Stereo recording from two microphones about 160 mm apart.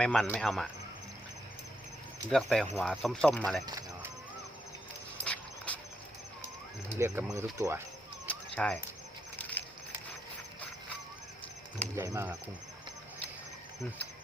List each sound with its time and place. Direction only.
0.0 s speech: 5° left (ahead or behind)
2.3 s speech: centre (ahead or behind)
3.7 s clip-clop: 20° right (ahead or behind)
5.2 s a sound: 10° left (ahead or behind)
6.8 s speech: 15° right (ahead or behind)
8.3 s a sound: 10° left (ahead or behind)
9.4 s patter: 10° left (ahead or behind)
11.9 s speech: 20° right (ahead or behind)